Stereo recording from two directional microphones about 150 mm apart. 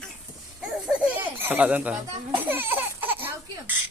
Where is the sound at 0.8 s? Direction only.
10° right (ahead or behind).